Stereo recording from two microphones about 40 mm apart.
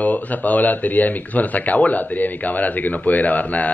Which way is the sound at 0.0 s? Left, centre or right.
Left.